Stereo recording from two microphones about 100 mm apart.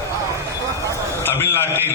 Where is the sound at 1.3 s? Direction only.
20° left (ahead or behind).